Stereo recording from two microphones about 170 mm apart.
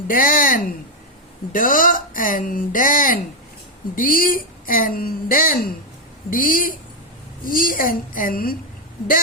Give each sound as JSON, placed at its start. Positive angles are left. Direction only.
{"t": 0.1, "sound": "a woman's voice", "side_deg": 55}